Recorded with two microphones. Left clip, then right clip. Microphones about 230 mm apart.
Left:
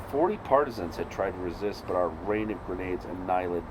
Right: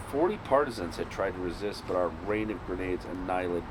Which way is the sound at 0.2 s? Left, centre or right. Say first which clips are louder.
Left 2 dB; left.